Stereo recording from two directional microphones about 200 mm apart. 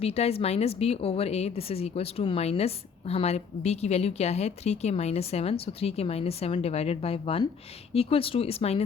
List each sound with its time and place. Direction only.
0.0 s a woman's voice: 30° left (ahead or behind)